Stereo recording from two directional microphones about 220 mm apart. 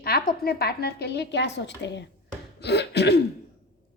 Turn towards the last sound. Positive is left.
turn(degrees=50)  # may be behind; listen again after turning